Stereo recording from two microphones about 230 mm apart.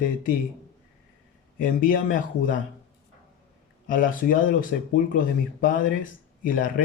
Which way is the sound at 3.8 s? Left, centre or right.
Left.